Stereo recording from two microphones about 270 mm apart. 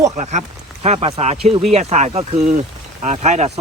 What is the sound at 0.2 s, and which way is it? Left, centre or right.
Speech, right.